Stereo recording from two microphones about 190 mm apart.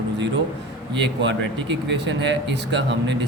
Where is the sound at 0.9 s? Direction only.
70° right (ahead or behind).